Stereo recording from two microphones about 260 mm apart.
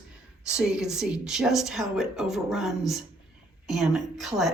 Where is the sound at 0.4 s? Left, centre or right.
Centre.